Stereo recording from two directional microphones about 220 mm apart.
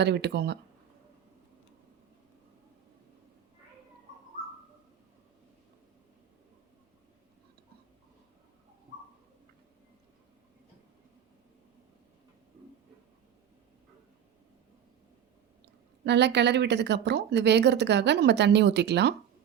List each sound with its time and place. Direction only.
0.0 s speech: 50° right (ahead or behind)
16.0 s speech: 50° right (ahead or behind)